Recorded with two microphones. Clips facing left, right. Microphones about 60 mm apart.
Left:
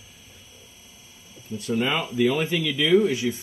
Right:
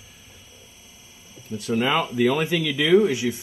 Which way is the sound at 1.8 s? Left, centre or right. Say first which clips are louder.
Right 2 dB; centre.